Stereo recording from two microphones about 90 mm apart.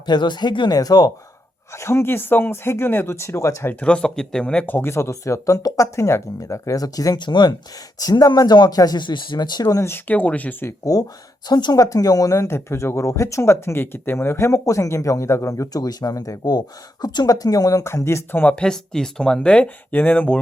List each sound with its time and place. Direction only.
0.0 s speech: 55° left (ahead or behind)
1.7 s speech: 30° left (ahead or behind)
3.8 s speech: 10° left (ahead or behind)
4.6 s speech: 25° left (ahead or behind); by 9.8 s 45° left (ahead or behind)
9.8 s speech: 20° left (ahead or behind)
11.4 s speech: 50° left (ahead or behind); by 18.5 s 25° left (ahead or behind)
18.5 s speech: 10° left (ahead or behind)